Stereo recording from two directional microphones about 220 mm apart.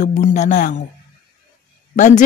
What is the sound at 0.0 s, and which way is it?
Speech, 35° left (ahead or behind).